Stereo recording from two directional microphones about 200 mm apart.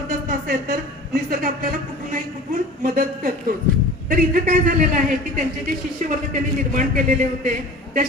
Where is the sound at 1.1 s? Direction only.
50° right (ahead or behind).